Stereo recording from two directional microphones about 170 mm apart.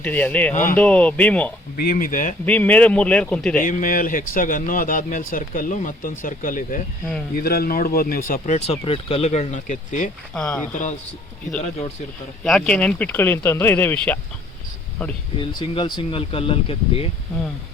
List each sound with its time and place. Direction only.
0.0 s speech: 10° left (ahead or behind)
0.5 s speech: 50° left (ahead or behind)
0.8 s speech: 10° left (ahead or behind)
1.7 s speech: 55° left (ahead or behind)
2.5 s speech: 10° left (ahead or behind)
3.6 s speech: 50° left (ahead or behind)
7.4 s speech: 65° left (ahead or behind)
8.3 s speech: 40° left (ahead or behind)
10.3 s speech: 5° left (ahead or behind)
12.4 s speech: 5° left (ahead or behind)
15.4 s speech: 30° left (ahead or behind)